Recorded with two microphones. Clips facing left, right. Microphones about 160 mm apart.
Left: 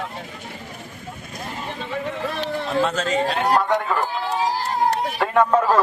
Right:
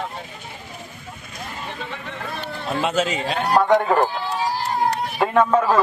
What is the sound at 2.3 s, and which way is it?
Run, 90° left.